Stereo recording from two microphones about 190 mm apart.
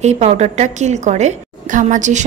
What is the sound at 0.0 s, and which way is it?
A woman's voice, 35° right (ahead or behind).